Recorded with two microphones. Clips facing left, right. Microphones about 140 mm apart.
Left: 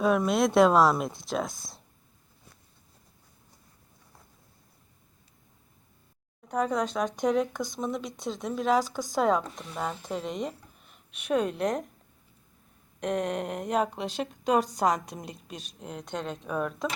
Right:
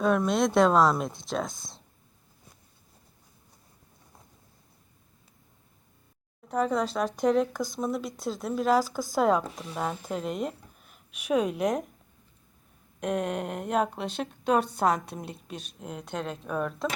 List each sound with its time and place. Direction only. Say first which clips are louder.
0.0 s speech: even; centre (ahead or behind)
6.5 s speech: right 1 dB; centre (ahead or behind)
13.0 s speech: even; 5° right (ahead or behind)